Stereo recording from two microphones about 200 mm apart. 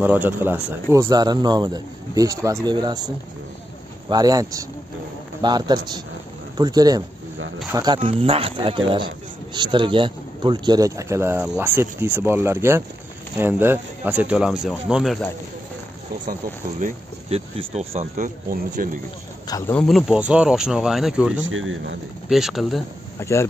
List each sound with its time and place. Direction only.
0.0 s speech: 10° right (ahead or behind)
4.1 s speech: 20° right (ahead or behind); by 15.2 s centre (ahead or behind)
16.8 s speech: 30° right (ahead or behind)
19.4 s speech: 20° left (ahead or behind)
19.7 s speech: 5° left (ahead or behind)
21.5 s speech: 80° right
22.3 s speech: centre (ahead or behind)
23.1 s speech: 15° left (ahead or behind)